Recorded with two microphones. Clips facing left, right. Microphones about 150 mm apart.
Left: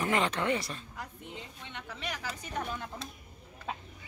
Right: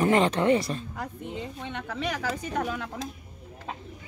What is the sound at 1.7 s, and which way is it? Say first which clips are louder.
A woman's voice: right 8 dB; 70° right (ahead or behind).